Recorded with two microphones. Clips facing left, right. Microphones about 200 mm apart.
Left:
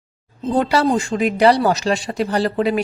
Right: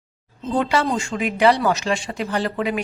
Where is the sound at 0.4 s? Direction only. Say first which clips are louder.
Left 4 dB; 40° left (ahead or behind).